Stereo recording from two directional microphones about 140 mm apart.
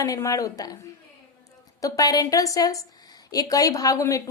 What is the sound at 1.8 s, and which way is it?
A woman's voice, 25° left (ahead or behind).